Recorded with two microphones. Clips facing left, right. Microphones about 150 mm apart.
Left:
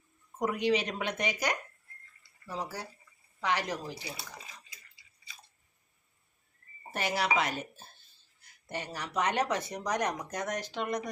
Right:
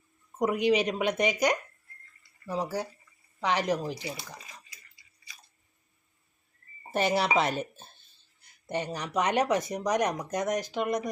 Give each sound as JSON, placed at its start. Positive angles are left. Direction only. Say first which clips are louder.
{"t": 0.3, "sound": "speech", "louder": "right 4 dB", "side_deg": -15}
{"t": 6.9, "sound": "speech", "louder": "right 5 dB", "side_deg": -25}